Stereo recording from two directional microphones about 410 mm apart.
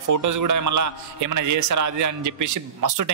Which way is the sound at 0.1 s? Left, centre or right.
Right.